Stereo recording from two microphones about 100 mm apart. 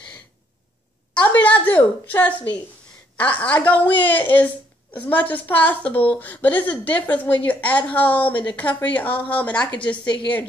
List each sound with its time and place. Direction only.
1.1 s a sound: 15° left (ahead or behind)
3.2 s a woman's voice: 15° left (ahead or behind)
10.0 s a woman's voice: 50° left (ahead or behind)